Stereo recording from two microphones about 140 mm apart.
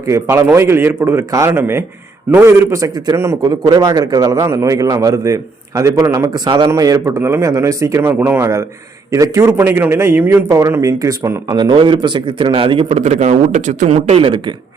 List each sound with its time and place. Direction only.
0.1 s a man's voice: 20° right (ahead or behind)
11.5 s a man's voice: 35° right (ahead or behind)